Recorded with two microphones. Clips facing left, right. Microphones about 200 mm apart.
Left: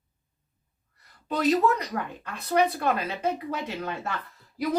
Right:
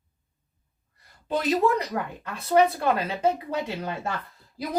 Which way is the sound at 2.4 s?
30° right (ahead or behind).